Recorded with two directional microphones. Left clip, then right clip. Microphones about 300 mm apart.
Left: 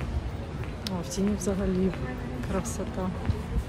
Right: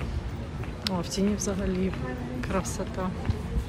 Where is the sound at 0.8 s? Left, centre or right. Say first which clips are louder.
Right 3 dB; centre.